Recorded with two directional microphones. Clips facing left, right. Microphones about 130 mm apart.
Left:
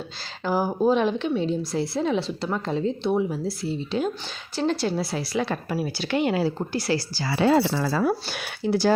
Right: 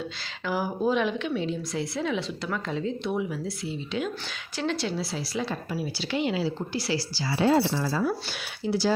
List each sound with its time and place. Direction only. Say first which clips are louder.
0.4 s a woman's voice: left 5 dB; 35° left (ahead or behind); by 8.9 s 50° left (ahead or behind)